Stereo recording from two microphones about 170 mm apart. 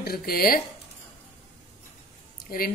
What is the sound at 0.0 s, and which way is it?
Speech, 60° left (ahead or behind).